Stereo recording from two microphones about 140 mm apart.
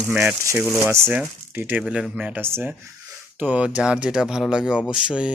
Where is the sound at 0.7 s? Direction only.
20° right (ahead or behind).